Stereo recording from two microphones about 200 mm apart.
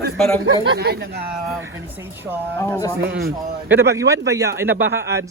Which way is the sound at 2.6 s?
15° left (ahead or behind).